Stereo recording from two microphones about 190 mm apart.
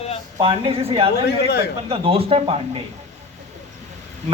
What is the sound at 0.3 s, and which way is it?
Speech, 25° right (ahead or behind).